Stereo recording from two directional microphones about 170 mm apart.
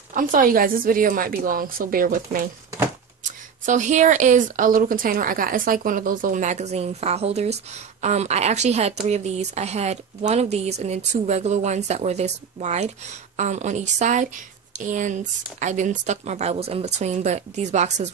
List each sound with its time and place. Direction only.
0.1 s a woman's voice: 50° right (ahead or behind)
3.6 s a woman's voice: 45° right (ahead or behind)